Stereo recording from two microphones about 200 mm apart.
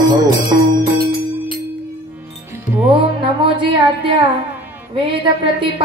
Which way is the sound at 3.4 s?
25° right (ahead or behind).